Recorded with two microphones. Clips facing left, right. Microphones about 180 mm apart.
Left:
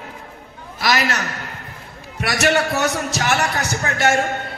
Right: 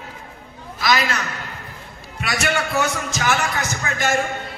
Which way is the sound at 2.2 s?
65° left (ahead or behind).